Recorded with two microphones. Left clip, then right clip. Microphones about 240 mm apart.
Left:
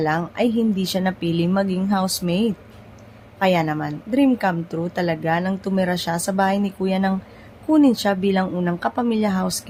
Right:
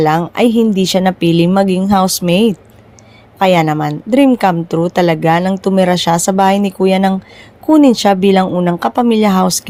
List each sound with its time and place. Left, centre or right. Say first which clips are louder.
0.0 s a woman's voice: right 9 dB; right